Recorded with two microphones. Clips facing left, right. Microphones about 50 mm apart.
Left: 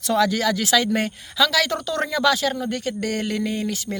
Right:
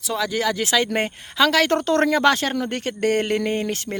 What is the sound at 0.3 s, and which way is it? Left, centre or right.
Speech, right.